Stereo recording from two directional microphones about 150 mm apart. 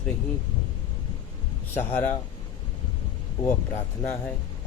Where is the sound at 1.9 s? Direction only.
10° left (ahead or behind).